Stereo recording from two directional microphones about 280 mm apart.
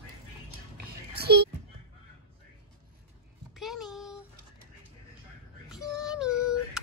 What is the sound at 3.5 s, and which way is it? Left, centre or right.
Child singing, centre.